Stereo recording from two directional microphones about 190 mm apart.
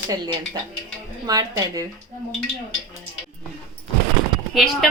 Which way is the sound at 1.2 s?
20° right (ahead or behind).